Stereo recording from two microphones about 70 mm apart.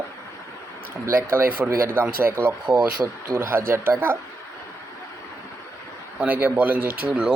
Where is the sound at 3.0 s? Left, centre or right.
Right.